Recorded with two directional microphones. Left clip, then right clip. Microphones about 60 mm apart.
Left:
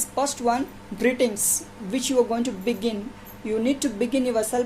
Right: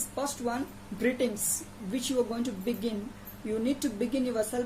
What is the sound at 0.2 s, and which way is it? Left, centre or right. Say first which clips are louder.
A woman's voice: left 9 dB; right.